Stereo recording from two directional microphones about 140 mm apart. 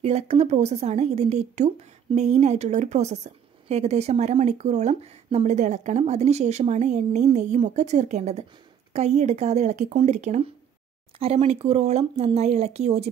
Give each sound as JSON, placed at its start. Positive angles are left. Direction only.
{"t": 0.0, "sound": "a woman's voice", "side_deg": -50}